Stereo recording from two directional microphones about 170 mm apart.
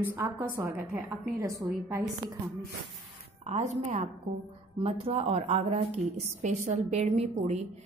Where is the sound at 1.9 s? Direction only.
20° right (ahead or behind).